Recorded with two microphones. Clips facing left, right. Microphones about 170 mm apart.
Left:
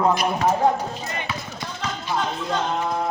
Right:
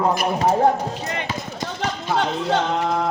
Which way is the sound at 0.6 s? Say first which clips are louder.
Right 2 dB; 70° right (ahead or behind).